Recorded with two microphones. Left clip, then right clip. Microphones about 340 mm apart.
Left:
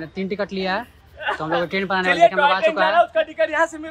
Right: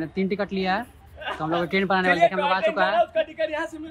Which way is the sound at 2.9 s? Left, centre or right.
Left.